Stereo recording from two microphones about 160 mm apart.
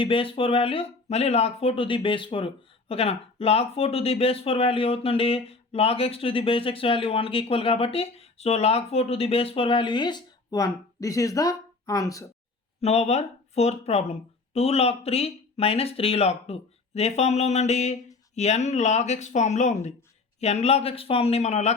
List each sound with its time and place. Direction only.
0.0 s speech: 35° left (ahead or behind)
12.8 s speech: 40° left (ahead or behind)